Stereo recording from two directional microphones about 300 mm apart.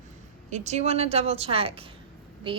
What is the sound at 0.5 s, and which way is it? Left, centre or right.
A woman's voice, right.